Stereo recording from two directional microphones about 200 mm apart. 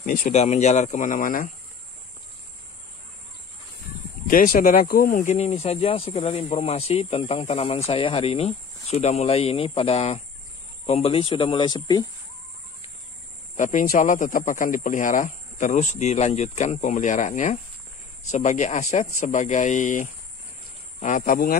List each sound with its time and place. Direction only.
0.0 s speech: 45° left (ahead or behind)
4.3 s speech: 45° left (ahead or behind); by 12.1 s 20° left (ahead or behind)
13.6 s speech: 40° left (ahead or behind)